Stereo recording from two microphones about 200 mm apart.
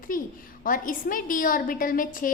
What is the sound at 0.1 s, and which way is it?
A woman's voice, 45° left (ahead or behind).